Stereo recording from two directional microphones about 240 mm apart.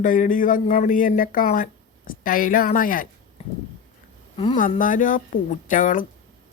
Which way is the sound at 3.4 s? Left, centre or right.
Left.